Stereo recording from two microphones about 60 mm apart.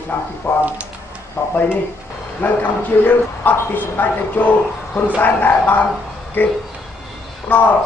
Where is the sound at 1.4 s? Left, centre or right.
Left.